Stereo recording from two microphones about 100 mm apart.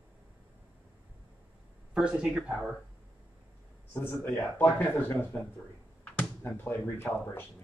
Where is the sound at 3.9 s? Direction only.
20° left (ahead or behind).